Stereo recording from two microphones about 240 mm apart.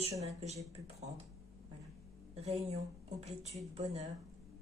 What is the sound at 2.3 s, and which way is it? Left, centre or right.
A woman's voice, right.